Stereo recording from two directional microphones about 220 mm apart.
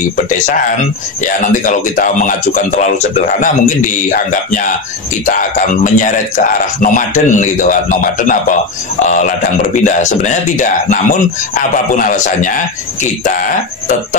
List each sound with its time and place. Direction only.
1.2 s a man's voice: 35° left (ahead or behind)
5.9 s a man's voice: 35° left (ahead or behind)